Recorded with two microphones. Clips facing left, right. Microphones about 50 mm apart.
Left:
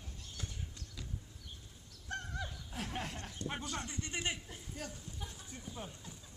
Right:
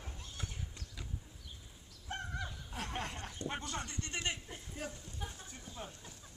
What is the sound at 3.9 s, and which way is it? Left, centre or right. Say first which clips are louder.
Speech: even; centre.